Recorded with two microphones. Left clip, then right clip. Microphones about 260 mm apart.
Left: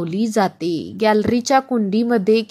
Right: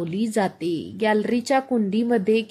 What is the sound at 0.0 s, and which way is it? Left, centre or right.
A woman's voice, centre.